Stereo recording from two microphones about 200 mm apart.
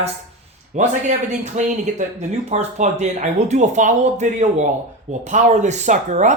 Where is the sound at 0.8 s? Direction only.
35° right (ahead or behind).